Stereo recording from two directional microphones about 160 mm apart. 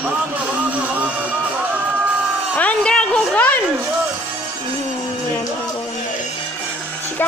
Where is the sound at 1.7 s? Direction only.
10° right (ahead or behind).